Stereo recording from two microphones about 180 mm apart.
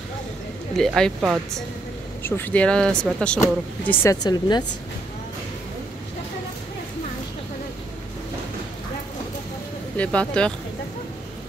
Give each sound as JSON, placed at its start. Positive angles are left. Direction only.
{"t": 0.7, "sound": "speech", "side_deg": 5}
{"t": 2.2, "sound": "speech", "side_deg": 10}
{"t": 9.9, "sound": "speech", "side_deg": 5}